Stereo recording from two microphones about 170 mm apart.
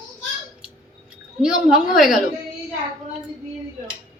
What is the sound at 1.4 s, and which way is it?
Speech, 5° right (ahead or behind).